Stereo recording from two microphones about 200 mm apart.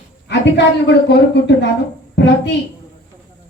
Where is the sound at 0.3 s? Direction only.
60° left (ahead or behind).